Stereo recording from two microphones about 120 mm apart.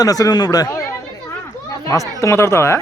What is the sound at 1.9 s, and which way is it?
Speech, 25° left (ahead or behind).